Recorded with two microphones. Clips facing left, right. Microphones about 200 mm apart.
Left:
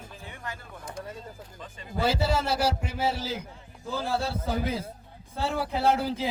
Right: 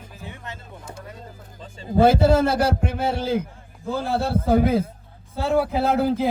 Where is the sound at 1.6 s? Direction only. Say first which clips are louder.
Right 11 dB; 30° right (ahead or behind).